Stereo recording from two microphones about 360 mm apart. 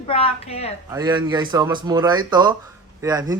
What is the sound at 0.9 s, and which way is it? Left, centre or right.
A man's voice, centre.